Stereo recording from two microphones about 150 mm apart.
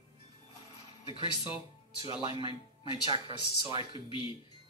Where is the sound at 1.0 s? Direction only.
35° left (ahead or behind).